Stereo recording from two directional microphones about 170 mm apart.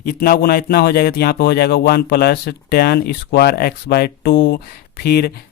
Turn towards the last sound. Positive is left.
turn(degrees=65)  # may be behind; listen again after turning